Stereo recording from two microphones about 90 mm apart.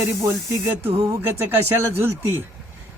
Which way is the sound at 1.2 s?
25° right (ahead or behind).